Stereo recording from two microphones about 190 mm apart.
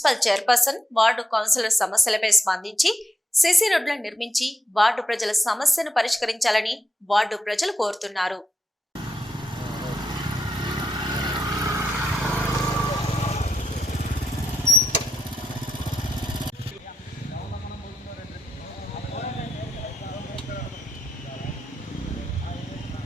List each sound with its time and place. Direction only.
0.0 s a woman's voice: centre (ahead or behind)
9.7 s vehicle: 20° right (ahead or behind)
12.2 s vehicle: 10° left (ahead or behind)
13.1 s vehicle: 35° left (ahead or behind)